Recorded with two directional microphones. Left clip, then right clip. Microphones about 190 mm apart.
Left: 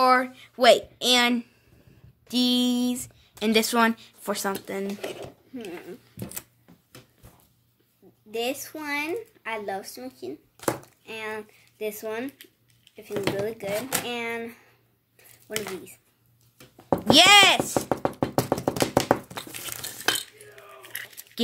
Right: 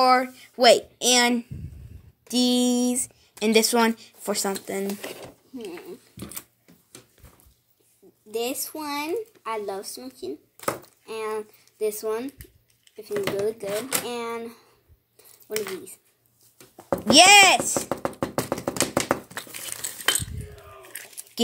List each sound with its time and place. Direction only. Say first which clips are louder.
0.0 s speech: right 1 dB; 5° right (ahead or behind)
6.1 s speech: left 1 dB; 20° left (ahead or behind)
8.3 s speech: right 1 dB; 25° left (ahead or behind)
17.1 s speech: right 2 dB; 5° right (ahead or behind)
18.2 s tap: left 2 dB; 15° right (ahead or behind)
19.5 s a sound: even; 20° left (ahead or behind)